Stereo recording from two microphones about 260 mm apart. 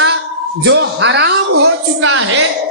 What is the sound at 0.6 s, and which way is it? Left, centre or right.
A man's voice, right.